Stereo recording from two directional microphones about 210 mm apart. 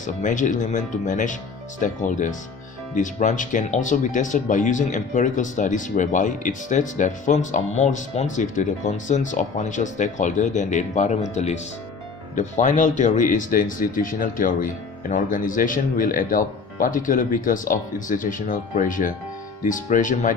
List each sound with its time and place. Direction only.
0.0 s speech: 35° left (ahead or behind)